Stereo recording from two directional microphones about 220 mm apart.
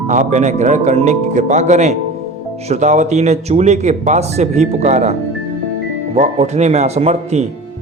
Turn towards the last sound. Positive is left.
turn(degrees=-30)  # may be behind; listen again after turning